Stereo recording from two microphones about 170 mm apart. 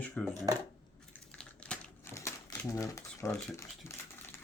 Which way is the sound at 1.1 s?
5° left (ahead or behind).